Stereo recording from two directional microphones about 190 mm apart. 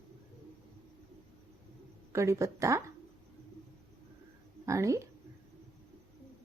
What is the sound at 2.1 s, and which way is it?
Speech, 15° right (ahead or behind).